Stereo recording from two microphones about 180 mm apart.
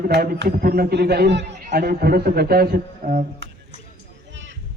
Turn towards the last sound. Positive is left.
turn(degrees=-55)  # may be behind; listen again after turning